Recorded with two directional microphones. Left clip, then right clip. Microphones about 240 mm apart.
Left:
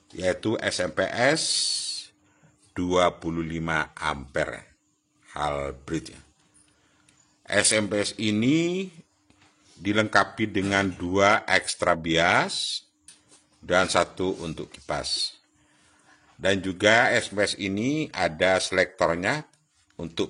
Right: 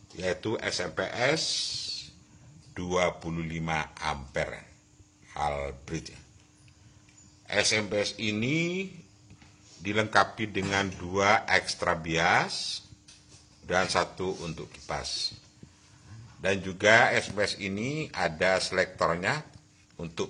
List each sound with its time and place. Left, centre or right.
0.2 s speech: left
7.4 s speech: left
16.3 s speech: left